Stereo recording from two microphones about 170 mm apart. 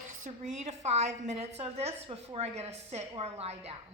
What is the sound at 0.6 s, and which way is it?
A woman's voice, 40° right (ahead or behind).